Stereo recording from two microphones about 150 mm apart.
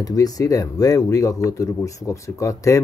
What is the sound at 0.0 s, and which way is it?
Speech, 25° left (ahead or behind).